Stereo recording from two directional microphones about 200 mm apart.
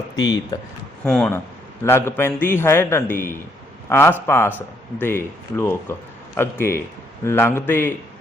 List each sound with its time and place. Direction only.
0.2 s speech: 20° left (ahead or behind)
1.0 s speech: 5° left (ahead or behind)